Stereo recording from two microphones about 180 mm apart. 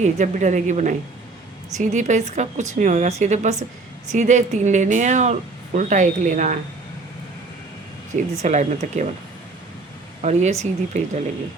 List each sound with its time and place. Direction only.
0.0 s speech: 40° right (ahead or behind)
8.4 s speech: 40° right (ahead or behind)
10.2 s speech: 40° right (ahead or behind)